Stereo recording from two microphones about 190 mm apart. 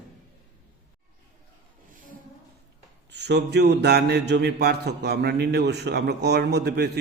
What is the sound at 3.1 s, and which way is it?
Speech, 60° right (ahead or behind).